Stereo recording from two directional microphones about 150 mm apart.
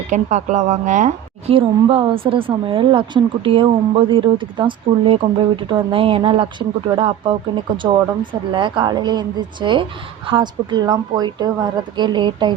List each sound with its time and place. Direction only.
0.1 s a woman's voice: 55° right (ahead or behind)
1.5 s a woman's voice: 40° right (ahead or behind)